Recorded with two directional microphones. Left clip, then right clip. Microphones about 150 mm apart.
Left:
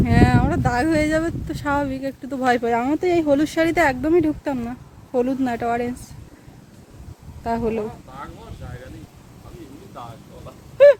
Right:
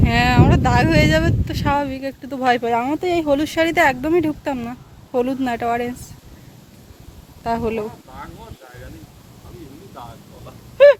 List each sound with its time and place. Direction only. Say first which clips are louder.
0.0 s speech: right 3 dB; 20° left (ahead or behind)
7.4 s speech: right 1 dB; 15° left (ahead or behind)